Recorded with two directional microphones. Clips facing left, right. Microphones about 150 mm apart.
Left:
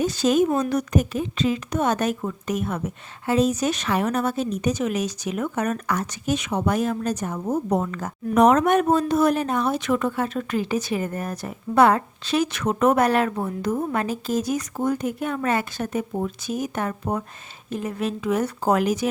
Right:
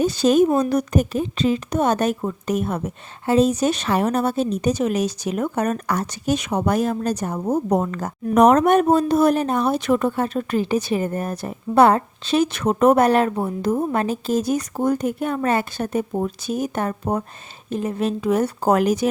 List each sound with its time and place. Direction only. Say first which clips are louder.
0.0 s a woman's voice: right 4 dB; 30° right (ahead or behind)